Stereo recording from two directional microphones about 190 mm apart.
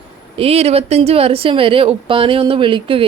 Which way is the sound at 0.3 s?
30° right (ahead or behind).